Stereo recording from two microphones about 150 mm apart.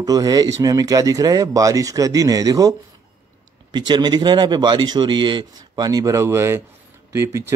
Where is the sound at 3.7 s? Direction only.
30° right (ahead or behind).